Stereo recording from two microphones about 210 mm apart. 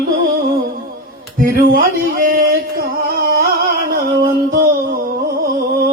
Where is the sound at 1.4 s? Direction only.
40° right (ahead or behind).